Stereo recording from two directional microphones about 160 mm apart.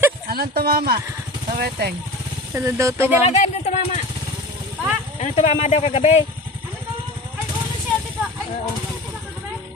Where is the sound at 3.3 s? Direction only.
45° left (ahead or behind).